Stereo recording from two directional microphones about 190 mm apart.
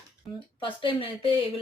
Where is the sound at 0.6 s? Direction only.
25° left (ahead or behind).